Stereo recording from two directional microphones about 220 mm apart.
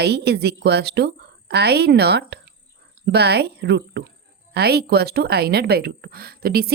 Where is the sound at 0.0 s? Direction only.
50° right (ahead or behind).